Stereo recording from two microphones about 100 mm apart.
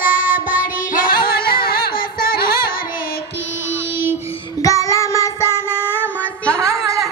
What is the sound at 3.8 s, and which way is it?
Music, 25° right (ahead or behind).